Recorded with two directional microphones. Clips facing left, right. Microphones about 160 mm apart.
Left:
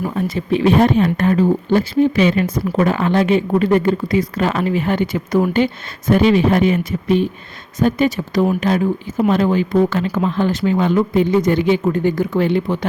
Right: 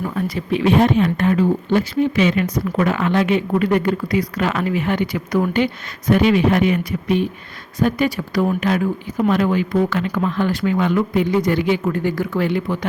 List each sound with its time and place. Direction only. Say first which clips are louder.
0.1 s speech: left 3 dB; 25° left (ahead or behind)